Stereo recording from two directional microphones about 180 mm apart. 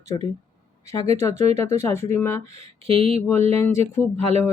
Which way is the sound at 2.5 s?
30° right (ahead or behind).